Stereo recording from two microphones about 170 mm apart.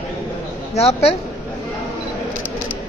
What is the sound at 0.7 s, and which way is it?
Speech, 40° left (ahead or behind).